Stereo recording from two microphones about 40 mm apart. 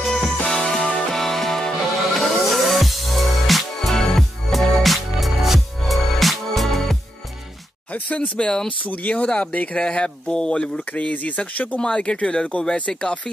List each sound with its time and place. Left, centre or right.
0.0 s music: centre
7.9 s speech: left
8.4 s speech: left
8.6 s speech: left
9.8 s speech: left
10.9 s speech: left
11.8 s speech: left